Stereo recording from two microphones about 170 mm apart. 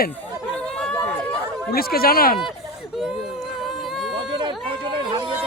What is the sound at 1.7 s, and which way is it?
Speech, 60° left (ahead or behind).